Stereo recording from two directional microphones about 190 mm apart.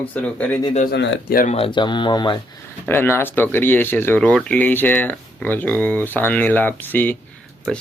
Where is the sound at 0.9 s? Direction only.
65° left (ahead or behind).